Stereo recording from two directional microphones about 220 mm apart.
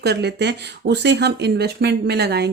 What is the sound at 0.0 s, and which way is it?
Speech, 50° right (ahead or behind).